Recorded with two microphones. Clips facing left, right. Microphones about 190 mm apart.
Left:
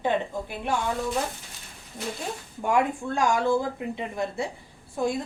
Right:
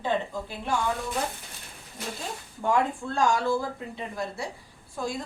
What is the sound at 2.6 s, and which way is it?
A woman's voice, 15° left (ahead or behind).